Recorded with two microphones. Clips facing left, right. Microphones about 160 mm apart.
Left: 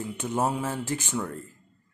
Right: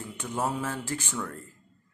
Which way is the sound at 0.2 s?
15° left (ahead or behind).